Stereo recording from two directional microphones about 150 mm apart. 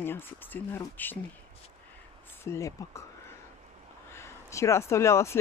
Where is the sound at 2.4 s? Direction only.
20° left (ahead or behind).